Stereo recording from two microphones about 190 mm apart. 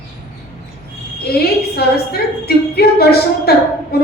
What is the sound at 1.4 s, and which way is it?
A woman's voice, 55° left (ahead or behind).